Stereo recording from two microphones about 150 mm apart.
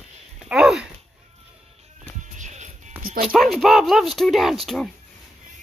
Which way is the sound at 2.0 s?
55° right (ahead or behind).